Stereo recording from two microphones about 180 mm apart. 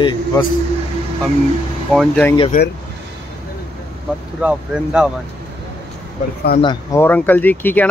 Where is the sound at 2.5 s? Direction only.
50° left (ahead or behind).